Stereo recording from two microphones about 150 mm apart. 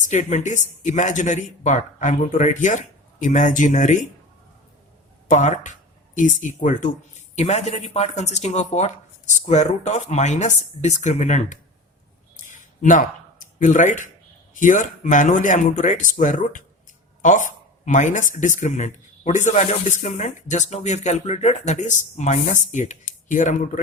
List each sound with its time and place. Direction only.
0.0 s speech: 50° left (ahead or behind)
5.3 s speech: 55° left (ahead or behind)
12.4 s a sound: 60° left (ahead or behind)
14.5 s speech: 60° left (ahead or behind)